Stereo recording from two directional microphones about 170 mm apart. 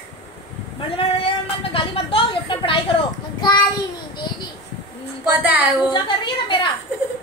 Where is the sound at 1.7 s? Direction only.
30° left (ahead or behind).